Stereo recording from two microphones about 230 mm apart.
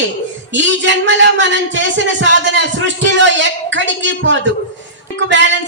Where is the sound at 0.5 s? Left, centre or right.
Right.